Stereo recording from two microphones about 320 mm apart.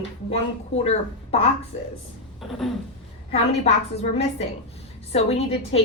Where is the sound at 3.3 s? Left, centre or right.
Centre.